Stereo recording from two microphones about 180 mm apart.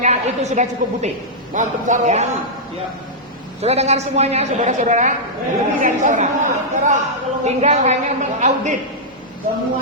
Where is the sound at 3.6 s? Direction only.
35° right (ahead or behind).